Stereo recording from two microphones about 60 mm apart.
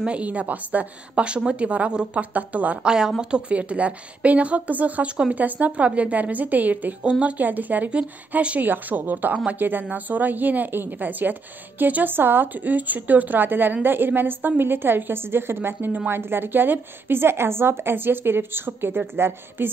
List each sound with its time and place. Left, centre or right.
0.0 s a woman's voice: right
2.9 s a woman's voice: centre; by 7.0 s right
7.0 s a woman's voice: centre; by 19.7 s right